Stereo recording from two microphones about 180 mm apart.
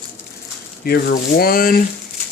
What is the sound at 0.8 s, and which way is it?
Speech, 60° left (ahead or behind).